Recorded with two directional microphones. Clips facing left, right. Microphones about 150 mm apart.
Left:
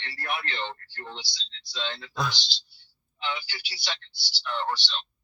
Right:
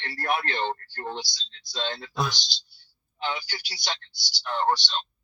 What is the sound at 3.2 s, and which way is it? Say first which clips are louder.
Speech: right 3 dB; 45° right (ahead or behind).